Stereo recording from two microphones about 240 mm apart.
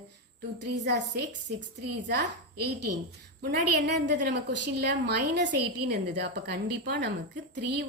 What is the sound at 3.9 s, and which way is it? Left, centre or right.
A woman's voice, right.